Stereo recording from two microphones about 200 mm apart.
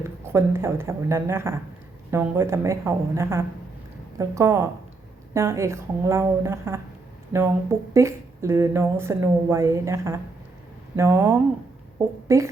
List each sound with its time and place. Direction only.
0.3 s speech: 10° right (ahead or behind)